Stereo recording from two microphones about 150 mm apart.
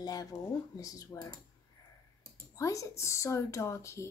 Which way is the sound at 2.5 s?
20° left (ahead or behind).